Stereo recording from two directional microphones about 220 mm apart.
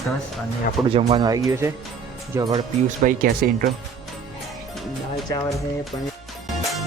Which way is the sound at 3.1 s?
40° right (ahead or behind).